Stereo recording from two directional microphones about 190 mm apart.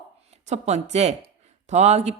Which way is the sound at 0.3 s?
35° right (ahead or behind).